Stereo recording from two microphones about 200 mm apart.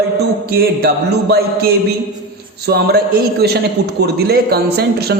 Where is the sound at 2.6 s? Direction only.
55° right (ahead or behind).